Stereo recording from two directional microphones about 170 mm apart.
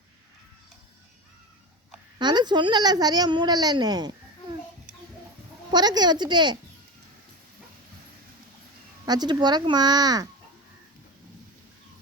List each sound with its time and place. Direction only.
2.1 s speech: 25° right (ahead or behind)
5.7 s speech: 25° right (ahead or behind)
9.0 s speech: 25° right (ahead or behind)